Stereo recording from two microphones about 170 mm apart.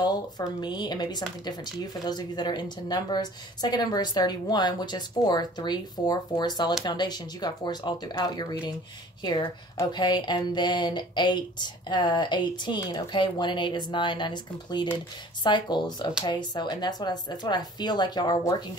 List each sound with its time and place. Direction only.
0.0 s speech: 25° left (ahead or behind)